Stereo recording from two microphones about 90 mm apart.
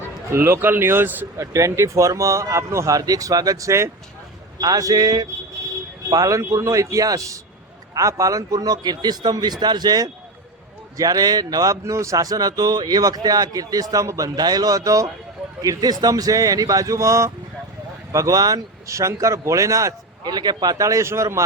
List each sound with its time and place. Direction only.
0.3 s a man's voice: 30° right (ahead or behind)
1.4 s a man's voice: 35° right (ahead or behind)
20.2 s speech: 50° right (ahead or behind); by 21.4 s 30° right (ahead or behind)